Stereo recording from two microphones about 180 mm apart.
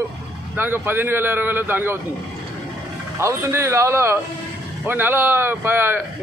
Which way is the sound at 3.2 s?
15° right (ahead or behind).